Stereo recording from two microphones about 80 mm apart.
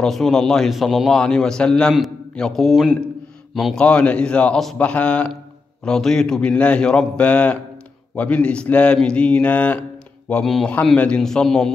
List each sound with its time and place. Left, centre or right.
0.0 s a man's voice: centre
3.8 s a man's voice: centre
10.4 s a man's voice: centre